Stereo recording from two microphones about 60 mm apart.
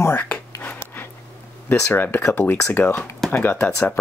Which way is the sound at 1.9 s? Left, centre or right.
Left.